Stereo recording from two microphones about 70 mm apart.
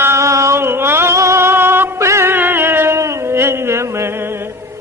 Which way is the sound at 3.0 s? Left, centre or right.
Right.